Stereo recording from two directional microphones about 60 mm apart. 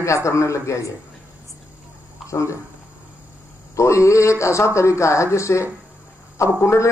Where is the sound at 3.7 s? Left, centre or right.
Left.